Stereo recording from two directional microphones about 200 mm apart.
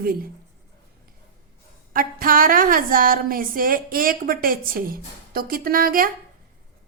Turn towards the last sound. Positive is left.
turn(degrees=-45)  # may be behind; listen again after turning